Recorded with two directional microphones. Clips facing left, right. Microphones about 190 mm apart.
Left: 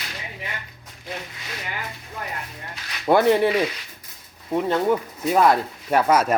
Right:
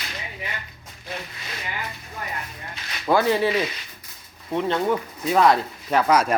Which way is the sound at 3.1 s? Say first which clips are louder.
Left 2 dB; 25° left (ahead or behind).